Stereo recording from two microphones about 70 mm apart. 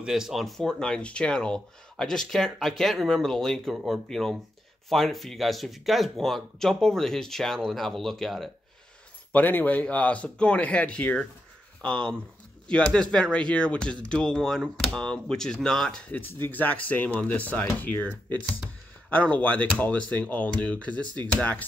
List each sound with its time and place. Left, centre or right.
0.0 s speech: centre
9.3 s speech: left; by 16.0 s centre
16.4 s speech: left
18.4 s speech: centre
19.0 s speech: left